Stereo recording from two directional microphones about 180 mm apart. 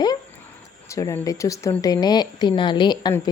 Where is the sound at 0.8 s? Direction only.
15° left (ahead or behind).